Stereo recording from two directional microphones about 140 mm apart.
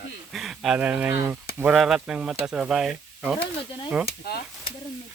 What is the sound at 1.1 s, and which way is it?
Speech, 20° right (ahead or behind).